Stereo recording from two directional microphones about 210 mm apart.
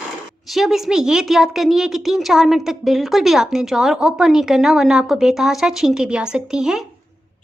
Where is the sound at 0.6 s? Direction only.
Centre (ahead or behind).